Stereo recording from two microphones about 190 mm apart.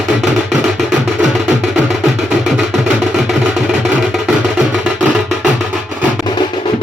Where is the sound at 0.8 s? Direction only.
Centre (ahead or behind).